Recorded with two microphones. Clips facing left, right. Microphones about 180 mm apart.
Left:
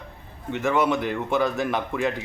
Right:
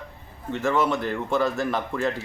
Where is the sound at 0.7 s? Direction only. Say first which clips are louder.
Left 1 dB; 20° left (ahead or behind).